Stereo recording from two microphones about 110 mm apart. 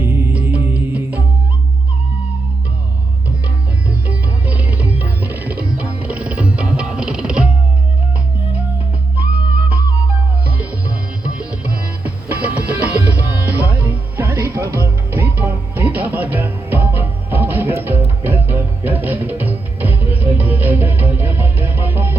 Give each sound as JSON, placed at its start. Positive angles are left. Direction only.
{"t": 0.0, "sound": "music", "side_deg": -20}
{"t": 3.8, "sound": "music", "side_deg": -15}
{"t": 10.4, "sound": "music", "side_deg": -15}